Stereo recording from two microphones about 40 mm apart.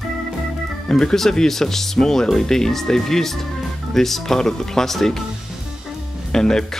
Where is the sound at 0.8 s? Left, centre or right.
Centre.